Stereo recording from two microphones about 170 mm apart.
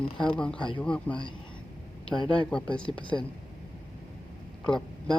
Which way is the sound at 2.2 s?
30° left (ahead or behind).